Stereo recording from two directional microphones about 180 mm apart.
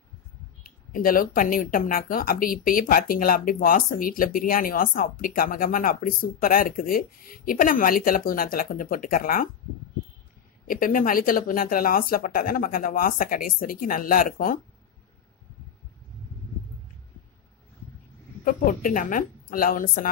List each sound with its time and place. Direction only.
0.7 s speech: 50° left (ahead or behind)
10.7 s speech: 50° left (ahead or behind)
18.4 s speech: 50° left (ahead or behind)